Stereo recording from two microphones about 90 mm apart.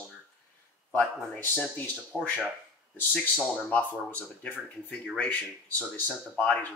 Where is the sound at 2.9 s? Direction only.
20° left (ahead or behind).